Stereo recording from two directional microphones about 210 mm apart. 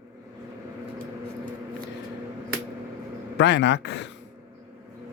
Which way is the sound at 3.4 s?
55° left (ahead or behind).